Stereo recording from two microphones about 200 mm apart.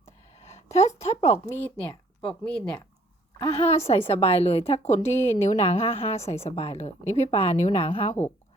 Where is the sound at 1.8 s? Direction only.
5° left (ahead or behind).